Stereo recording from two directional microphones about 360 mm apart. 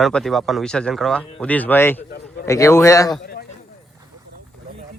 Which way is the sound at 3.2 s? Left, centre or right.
Left.